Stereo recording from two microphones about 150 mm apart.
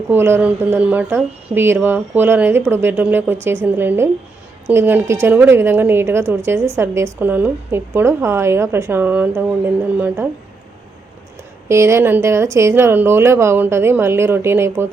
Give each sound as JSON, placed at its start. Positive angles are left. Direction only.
{"t": 0.1, "sound": "a woman's voice", "side_deg": -15}
{"t": 11.7, "sound": "a woman's voice", "side_deg": -20}